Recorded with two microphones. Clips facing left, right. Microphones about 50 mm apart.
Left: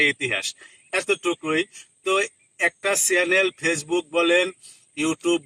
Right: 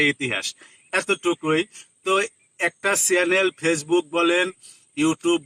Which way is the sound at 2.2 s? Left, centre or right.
Centre.